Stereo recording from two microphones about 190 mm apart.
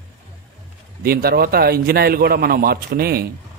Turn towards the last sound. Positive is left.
turn(degrees=-55)  # may be behind; listen again after turning